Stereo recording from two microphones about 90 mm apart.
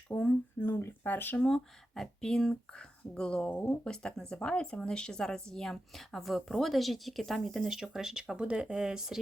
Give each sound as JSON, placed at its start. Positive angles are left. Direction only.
{"t": 0.1, "sound": "speech", "side_deg": 15}
{"t": 0.6, "sound": "speech", "side_deg": 30}
{"t": 1.4, "sound": "speech", "side_deg": 5}